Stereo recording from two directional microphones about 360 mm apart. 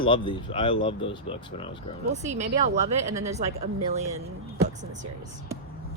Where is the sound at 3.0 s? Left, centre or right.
Centre.